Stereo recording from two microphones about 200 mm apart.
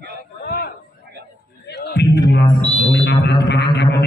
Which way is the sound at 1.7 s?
55° left (ahead or behind).